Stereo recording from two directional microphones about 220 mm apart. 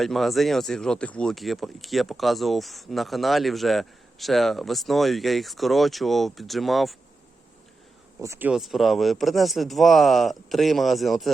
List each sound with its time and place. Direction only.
0.0 s speech: centre (ahead or behind)
8.2 s speech: 10° right (ahead or behind)